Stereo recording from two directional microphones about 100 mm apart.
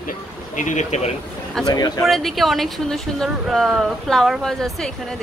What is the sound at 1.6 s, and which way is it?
Speech, 40° left (ahead or behind).